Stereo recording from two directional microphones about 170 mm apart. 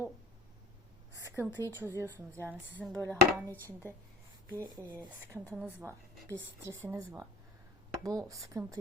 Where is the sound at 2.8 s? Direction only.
5° left (ahead or behind).